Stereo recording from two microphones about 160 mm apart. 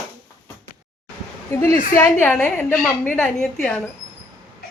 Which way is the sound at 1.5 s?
20° left (ahead or behind).